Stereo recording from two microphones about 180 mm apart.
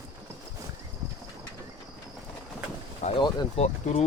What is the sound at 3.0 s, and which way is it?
Speech, 25° left (ahead or behind).